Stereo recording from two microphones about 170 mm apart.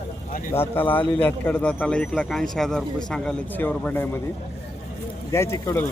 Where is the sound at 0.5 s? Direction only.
10° left (ahead or behind).